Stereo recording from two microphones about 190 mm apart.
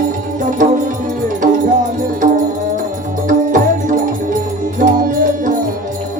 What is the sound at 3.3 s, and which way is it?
Music, 45° right (ahead or behind).